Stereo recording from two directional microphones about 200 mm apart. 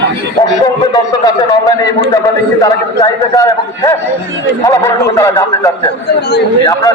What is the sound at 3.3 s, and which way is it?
A man's voice, 15° left (ahead or behind).